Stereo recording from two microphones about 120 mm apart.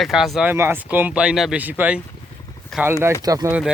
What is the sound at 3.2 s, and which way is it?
Speech, 30° right (ahead or behind).